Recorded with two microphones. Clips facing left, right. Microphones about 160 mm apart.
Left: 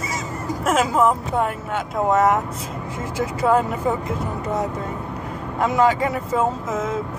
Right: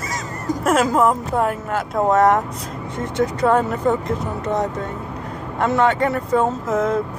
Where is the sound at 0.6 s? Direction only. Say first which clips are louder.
Right 2 dB; centre (ahead or behind).